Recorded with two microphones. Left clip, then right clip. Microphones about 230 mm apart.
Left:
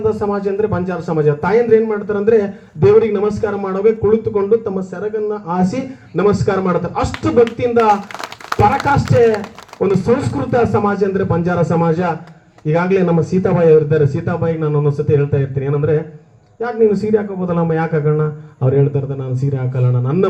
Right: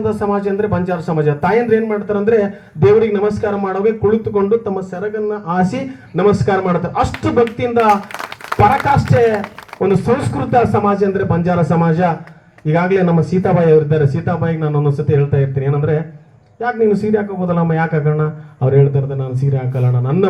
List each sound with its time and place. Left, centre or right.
0.0 s speech: right
9.1 s speech: right